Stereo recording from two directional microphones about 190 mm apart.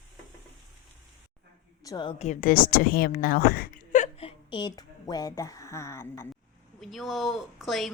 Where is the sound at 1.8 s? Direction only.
25° left (ahead or behind).